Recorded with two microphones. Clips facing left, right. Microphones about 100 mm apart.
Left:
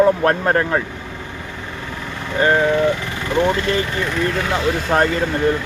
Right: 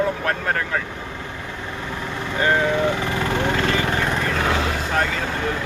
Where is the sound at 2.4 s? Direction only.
25° left (ahead or behind).